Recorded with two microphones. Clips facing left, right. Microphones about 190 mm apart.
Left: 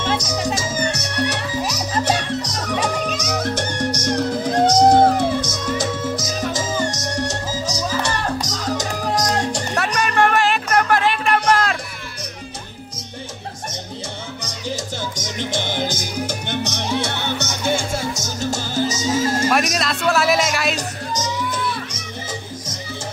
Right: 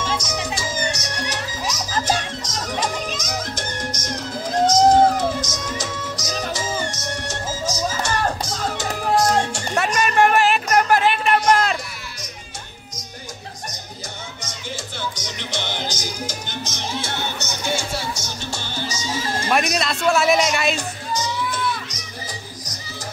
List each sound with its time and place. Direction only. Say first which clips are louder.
0.2 s music: left 4 dB; 35° left (ahead or behind)
0.9 s music: left 5 dB; 65° left (ahead or behind)
6.1 s music: left 3 dB; 45° left (ahead or behind)
9.9 s music: right 1 dB; 5° right (ahead or behind)
14.4 s music: left 6 dB; 40° left (ahead or behind)
19.7 s music: even; centre (ahead or behind)
20.7 s music: left 1 dB; 40° left (ahead or behind)